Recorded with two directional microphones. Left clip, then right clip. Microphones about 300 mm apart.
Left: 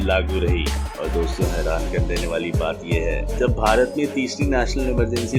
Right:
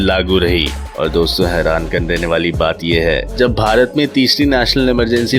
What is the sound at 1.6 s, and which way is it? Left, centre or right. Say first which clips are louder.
Speech: right 9 dB; centre.